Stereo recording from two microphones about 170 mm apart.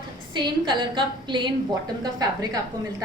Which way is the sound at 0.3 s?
25° right (ahead or behind).